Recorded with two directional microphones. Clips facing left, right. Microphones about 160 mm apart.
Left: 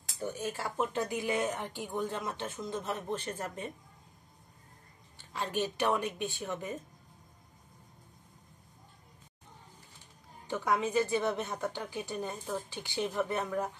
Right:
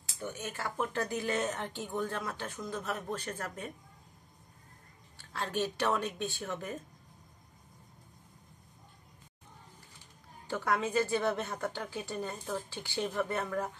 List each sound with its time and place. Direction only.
0.2 s speech: 35° left (ahead or behind)
5.1 s a woman's voice: 15° left (ahead or behind)
10.4 s a woman's voice: 15° left (ahead or behind)